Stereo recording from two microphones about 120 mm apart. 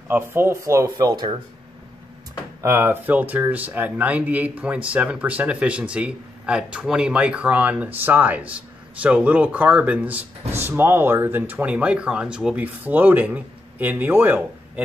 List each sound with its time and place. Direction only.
0.1 s speech: 20° right (ahead or behind)
2.6 s speech: 20° right (ahead or behind)